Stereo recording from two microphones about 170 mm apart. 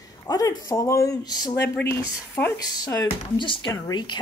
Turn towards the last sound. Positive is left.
turn(degrees=25)  # may be behind; listen again after turning